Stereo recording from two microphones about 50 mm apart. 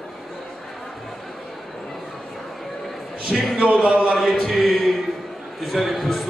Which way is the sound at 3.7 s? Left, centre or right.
Centre.